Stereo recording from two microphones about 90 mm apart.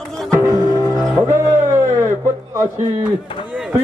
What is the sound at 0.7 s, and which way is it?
Music, 40° left (ahead or behind).